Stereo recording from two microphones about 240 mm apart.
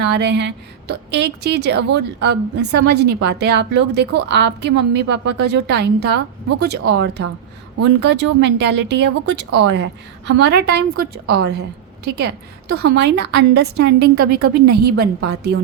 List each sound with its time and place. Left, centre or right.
0.0 s a woman's voice: right